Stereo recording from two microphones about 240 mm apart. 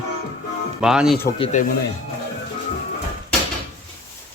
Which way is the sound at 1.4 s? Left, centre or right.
Left.